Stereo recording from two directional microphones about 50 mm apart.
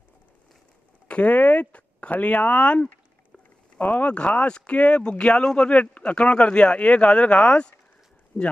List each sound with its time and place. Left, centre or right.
1.0 s speech: left